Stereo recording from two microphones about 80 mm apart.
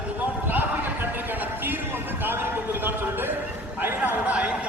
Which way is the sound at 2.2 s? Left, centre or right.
Right.